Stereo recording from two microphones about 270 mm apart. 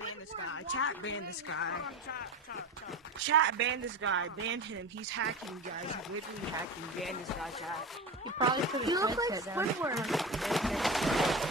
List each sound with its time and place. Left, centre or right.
0.5 s speech: left
3.3 s speech: right
7.0 s speech: centre
8.4 s speech: centre
9.9 s speech: centre